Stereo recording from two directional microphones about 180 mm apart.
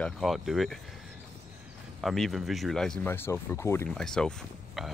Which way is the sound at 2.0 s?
Centre (ahead or behind).